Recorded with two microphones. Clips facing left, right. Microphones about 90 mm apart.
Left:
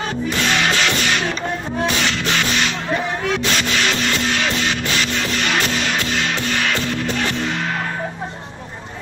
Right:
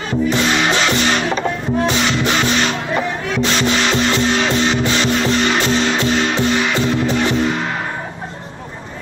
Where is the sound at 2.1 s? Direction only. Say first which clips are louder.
Right 4 dB; 20° right (ahead or behind).